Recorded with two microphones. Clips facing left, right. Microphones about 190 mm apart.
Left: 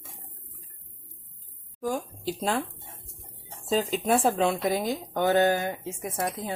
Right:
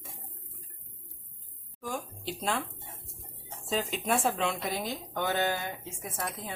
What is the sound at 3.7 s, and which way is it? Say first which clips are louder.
Speech: left 6 dB; 35° left (ahead or behind).